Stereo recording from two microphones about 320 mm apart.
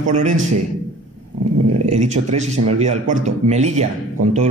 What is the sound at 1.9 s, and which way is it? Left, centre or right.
A man's voice, right.